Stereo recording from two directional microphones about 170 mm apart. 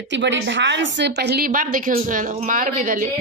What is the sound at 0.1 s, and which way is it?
A woman's voice, 90° right.